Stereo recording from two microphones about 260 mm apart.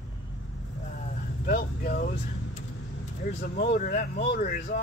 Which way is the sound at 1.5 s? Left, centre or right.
Left.